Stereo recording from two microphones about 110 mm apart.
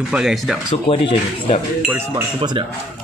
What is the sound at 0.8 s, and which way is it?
Speech, 55° left (ahead or behind).